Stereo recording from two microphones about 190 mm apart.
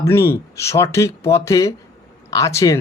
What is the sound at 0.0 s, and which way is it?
Speech, 15° left (ahead or behind).